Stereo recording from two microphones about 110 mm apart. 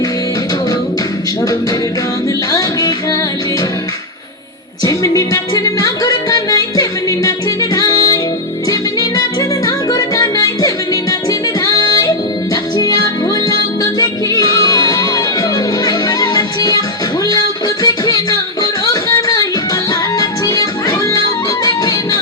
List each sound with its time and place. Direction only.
2.5 s music: 35° left (ahead or behind)
4.8 s music: 30° left (ahead or behind)
17.8 s music: 35° left (ahead or behind)